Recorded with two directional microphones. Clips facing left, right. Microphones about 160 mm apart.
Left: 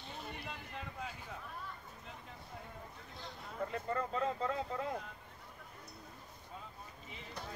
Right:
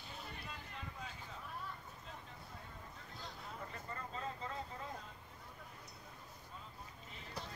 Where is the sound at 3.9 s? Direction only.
65° left (ahead or behind).